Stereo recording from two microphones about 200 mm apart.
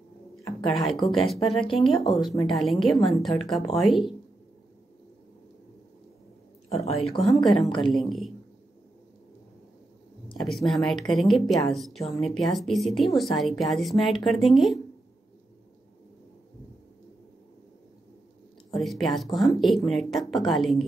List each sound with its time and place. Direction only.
0.6 s speech: centre (ahead or behind)
1.4 s speech: 25° left (ahead or behind)
1.8 s speech: centre (ahead or behind)
6.8 s speech: 30° left (ahead or behind)
7.2 s speech: centre (ahead or behind)
10.4 s speech: centre (ahead or behind)
18.7 s speech: centre (ahead or behind)